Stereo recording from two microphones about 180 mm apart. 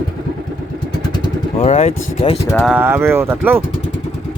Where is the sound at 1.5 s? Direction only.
35° left (ahead or behind).